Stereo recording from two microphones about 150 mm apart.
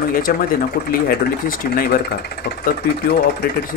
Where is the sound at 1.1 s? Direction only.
85° left.